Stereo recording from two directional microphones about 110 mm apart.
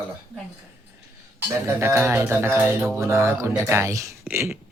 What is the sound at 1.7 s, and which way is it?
Speech, 20° right (ahead or behind).